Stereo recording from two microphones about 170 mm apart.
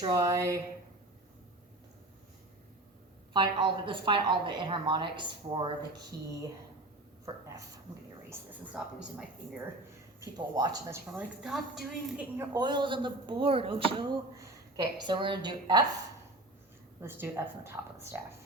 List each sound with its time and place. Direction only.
0.1 s a woman's voice: 20° right (ahead or behind)
3.3 s a woman's voice: 30° right (ahead or behind)
8.3 s a woman's voice: 5° right (ahead or behind)
10.2 s a woman's voice: 20° right (ahead or behind)
11.1 s a woman's voice: 5° right (ahead or behind)
12.4 s a woman's voice: 25° right (ahead or behind)
14.3 s a woman's voice: 20° right (ahead or behind)
17.0 s speech: 15° right (ahead or behind)